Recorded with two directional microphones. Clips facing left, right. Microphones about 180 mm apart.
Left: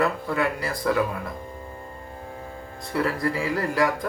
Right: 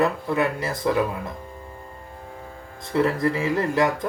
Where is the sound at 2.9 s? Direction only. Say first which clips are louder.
Right 3 dB; 25° right (ahead or behind).